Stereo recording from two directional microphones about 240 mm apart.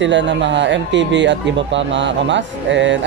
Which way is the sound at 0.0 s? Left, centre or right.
Right.